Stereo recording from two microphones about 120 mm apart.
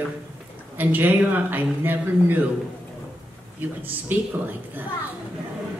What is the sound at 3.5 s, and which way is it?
Speech, 15° right (ahead or behind).